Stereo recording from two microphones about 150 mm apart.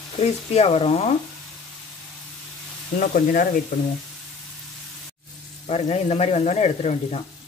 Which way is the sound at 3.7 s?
75° left (ahead or behind).